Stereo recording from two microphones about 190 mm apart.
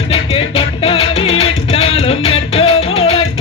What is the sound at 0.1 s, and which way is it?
Music, 30° left (ahead or behind).